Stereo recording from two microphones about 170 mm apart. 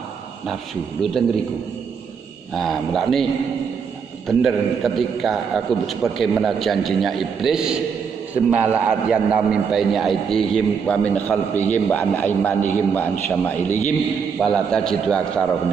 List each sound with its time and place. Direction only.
2.5 s a man's voice: centre (ahead or behind)
4.3 s a man's voice: centre (ahead or behind)
13.7 s a man's voice: 45° left (ahead or behind)
14.4 s a man's voice: 5° left (ahead or behind)